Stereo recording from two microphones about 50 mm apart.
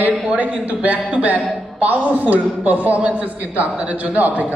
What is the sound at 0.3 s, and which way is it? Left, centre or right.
Speech, right.